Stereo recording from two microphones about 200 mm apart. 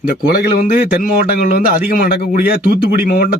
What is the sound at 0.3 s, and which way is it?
Speech, 50° left (ahead or behind).